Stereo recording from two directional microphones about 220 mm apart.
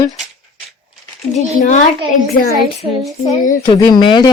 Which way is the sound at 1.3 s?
35° left (ahead or behind).